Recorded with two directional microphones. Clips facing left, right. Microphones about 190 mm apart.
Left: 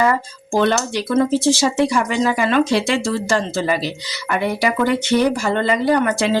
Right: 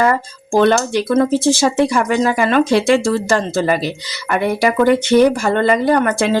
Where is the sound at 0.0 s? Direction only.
50° right (ahead or behind).